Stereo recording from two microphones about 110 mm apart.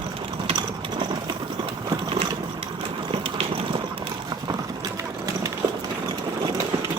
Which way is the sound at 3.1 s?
55° right (ahead or behind).